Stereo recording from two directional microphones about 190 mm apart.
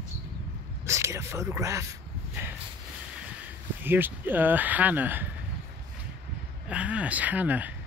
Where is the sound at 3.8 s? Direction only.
10° right (ahead or behind).